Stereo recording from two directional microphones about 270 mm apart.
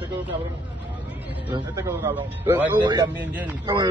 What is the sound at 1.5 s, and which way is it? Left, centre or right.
Speech, centre.